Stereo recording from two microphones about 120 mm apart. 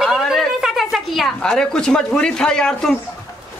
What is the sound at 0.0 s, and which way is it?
A woman's voice, centre (ahead or behind).